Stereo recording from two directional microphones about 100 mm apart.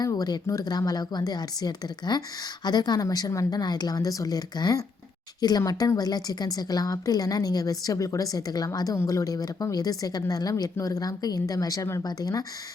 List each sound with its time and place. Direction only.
0.0 s a woman's voice: 40° left (ahead or behind)